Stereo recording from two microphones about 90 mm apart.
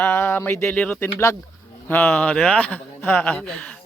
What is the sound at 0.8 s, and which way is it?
Speech, 15° left (ahead or behind).